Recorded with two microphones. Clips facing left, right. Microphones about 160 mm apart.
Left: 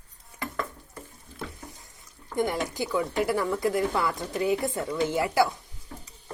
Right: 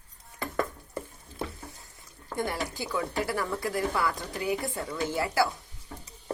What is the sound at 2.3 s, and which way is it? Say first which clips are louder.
Speech: left 4 dB; 20° left (ahead or behind).